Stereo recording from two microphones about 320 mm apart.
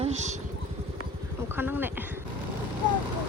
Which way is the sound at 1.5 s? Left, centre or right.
Centre.